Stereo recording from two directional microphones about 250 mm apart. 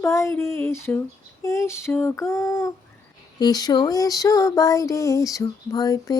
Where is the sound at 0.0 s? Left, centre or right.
Centre.